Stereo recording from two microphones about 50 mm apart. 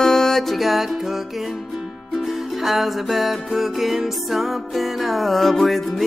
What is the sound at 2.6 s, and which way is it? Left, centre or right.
Music, centre.